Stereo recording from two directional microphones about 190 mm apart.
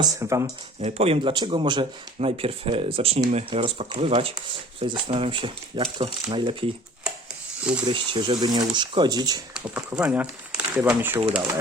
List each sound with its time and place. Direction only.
0.0 s speech: 15° right (ahead or behind)
0.8 s speech: 35° right (ahead or behind)
7.9 s speech: 25° right (ahead or behind)
9.6 s speech: 5° right (ahead or behind)